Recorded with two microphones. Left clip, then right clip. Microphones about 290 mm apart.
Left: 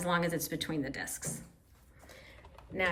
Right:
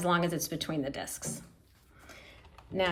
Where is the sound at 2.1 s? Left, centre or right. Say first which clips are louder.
Right 2 dB; right.